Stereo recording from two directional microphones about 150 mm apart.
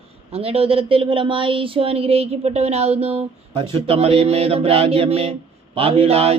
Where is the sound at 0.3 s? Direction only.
40° right (ahead or behind).